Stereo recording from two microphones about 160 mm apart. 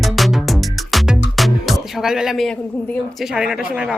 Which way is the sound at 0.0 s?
Centre (ahead or behind).